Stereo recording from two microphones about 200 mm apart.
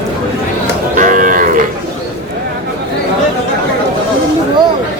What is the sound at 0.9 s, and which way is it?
Cattle, 40° right (ahead or behind).